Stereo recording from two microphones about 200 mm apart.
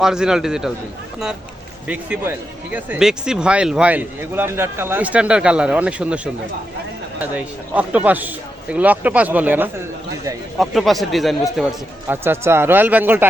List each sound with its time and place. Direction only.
0.0 s speech: 5° right (ahead or behind)
1.9 s speech: 10° right (ahead or behind)
7.3 s a man's voice: 5° right (ahead or behind)